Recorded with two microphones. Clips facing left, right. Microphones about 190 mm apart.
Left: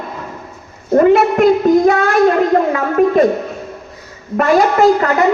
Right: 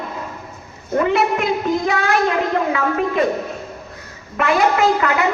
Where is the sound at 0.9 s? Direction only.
45° left (ahead or behind).